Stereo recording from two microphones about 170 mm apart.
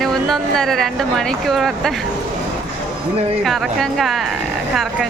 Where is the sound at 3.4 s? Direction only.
Centre (ahead or behind).